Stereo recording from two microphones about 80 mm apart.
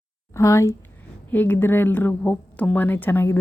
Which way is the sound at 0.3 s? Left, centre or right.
Left.